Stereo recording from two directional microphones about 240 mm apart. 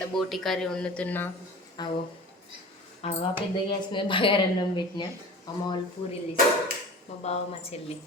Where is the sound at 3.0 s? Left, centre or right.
Left.